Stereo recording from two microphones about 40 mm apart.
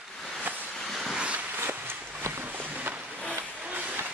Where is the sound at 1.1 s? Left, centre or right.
Right.